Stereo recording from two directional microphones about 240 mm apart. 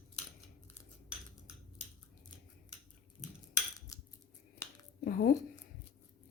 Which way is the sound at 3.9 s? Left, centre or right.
Centre.